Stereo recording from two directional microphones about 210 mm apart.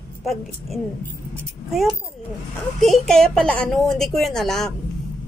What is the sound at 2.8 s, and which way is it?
Speech, centre (ahead or behind).